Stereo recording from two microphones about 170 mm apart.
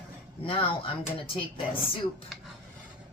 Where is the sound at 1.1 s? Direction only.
35° left (ahead or behind).